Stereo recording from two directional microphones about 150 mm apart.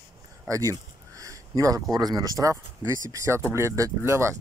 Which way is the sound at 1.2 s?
20° right (ahead or behind).